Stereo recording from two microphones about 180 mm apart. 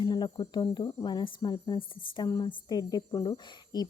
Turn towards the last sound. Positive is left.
turn(degrees=25)  # may be behind; listen again after turning